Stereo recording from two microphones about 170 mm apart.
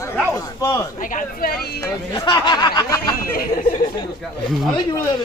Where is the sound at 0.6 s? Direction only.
15° left (ahead or behind).